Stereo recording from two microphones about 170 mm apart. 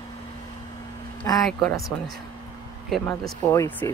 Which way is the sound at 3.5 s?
15° left (ahead or behind).